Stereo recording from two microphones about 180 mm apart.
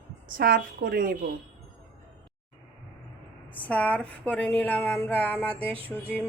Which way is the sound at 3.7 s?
5° left (ahead or behind).